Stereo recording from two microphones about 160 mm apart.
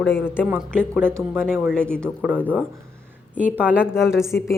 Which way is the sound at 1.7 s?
5° left (ahead or behind).